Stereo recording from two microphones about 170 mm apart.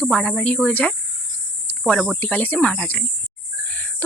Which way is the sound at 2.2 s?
10° left (ahead or behind).